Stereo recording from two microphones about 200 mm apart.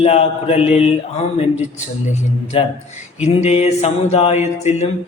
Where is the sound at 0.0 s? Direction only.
30° left (ahead or behind).